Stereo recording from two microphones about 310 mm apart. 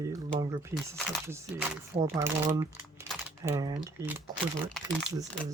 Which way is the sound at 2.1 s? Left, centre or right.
Centre.